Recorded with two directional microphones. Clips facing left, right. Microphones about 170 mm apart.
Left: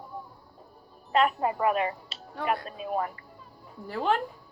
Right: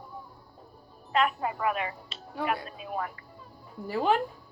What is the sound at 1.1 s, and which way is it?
Music, 35° left (ahead or behind).